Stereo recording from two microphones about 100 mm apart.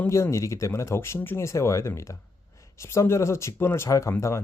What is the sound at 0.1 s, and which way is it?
Speech, 30° left (ahead or behind).